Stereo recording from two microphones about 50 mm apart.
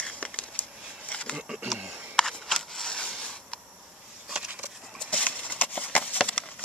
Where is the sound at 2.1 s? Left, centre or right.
Centre.